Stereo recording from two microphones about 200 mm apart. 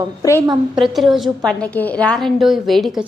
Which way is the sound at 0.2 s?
15° left (ahead or behind).